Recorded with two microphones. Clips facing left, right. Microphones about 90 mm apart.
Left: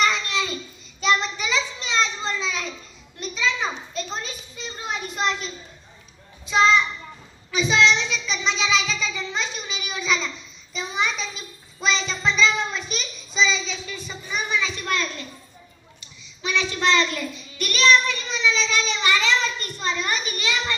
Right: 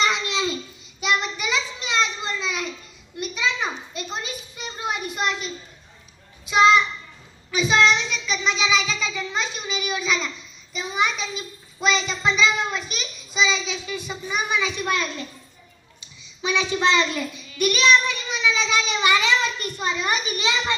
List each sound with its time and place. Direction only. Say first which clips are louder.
0.0 s babbling: even; 20° right (ahead or behind)
1.0 s a sound: left 2 dB; 5° right (ahead or behind)
7.5 s child singing: right 1 dB; 5° right (ahead or behind); by 20.7 s 20° right (ahead or behind)